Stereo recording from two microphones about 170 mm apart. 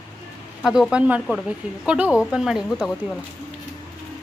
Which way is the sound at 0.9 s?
5° right (ahead or behind).